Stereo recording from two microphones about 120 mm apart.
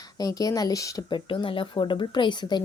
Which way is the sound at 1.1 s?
40° left (ahead or behind).